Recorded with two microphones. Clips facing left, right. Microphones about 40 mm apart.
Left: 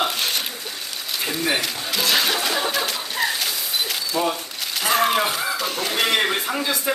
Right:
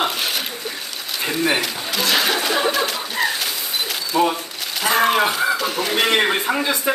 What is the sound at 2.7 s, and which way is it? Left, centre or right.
Bird, centre.